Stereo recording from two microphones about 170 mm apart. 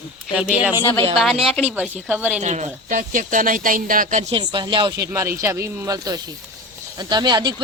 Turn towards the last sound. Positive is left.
turn(degrees=-25)  # may be behind; listen again after turning